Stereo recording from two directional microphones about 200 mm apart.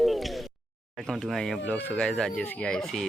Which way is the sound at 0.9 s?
Centre (ahead or behind).